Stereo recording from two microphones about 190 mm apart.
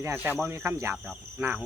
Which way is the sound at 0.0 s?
10° right (ahead or behind).